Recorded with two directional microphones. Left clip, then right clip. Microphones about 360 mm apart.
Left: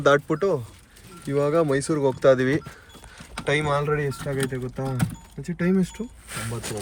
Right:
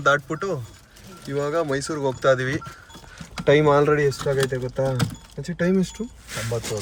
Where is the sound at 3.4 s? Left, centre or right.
Centre.